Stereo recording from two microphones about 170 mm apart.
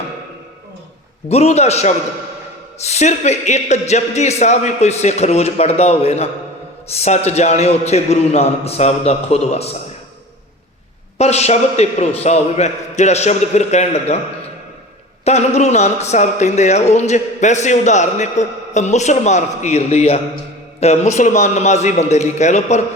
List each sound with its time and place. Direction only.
1.3 s speech: 40° left (ahead or behind)
11.2 s speech: 40° left (ahead or behind)
15.2 s a man's voice: 40° left (ahead or behind)